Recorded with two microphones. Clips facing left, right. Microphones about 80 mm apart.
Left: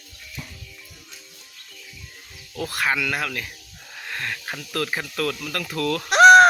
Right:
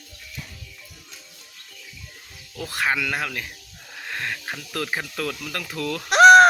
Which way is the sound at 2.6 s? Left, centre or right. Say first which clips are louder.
Even; right.